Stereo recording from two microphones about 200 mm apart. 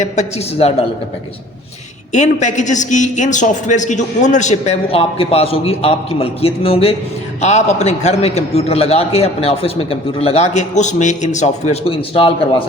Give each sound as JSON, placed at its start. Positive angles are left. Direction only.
{"t": 0.0, "sound": "a man's voice", "side_deg": 35}
{"t": 2.1, "sound": "a man's voice", "side_deg": 35}